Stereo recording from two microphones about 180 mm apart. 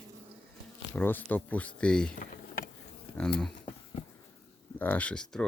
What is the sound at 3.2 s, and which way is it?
Speech, 5° left (ahead or behind).